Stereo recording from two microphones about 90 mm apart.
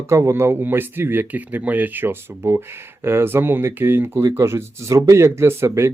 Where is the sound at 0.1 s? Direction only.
30° right (ahead or behind).